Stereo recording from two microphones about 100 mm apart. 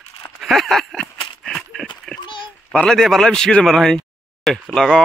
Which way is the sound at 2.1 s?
50° left (ahead or behind).